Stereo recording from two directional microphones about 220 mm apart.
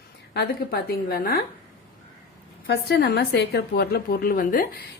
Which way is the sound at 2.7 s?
45° left (ahead or behind).